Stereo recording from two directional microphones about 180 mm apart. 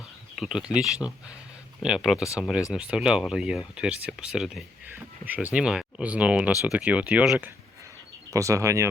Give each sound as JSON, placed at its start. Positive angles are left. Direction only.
{"t": 0.3, "sound": "speech", "side_deg": -5}